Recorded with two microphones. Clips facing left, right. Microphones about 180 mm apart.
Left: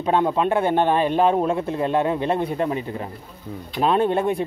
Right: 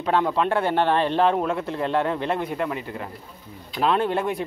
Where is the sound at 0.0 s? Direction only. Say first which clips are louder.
Left 2 dB; 20° left (ahead or behind).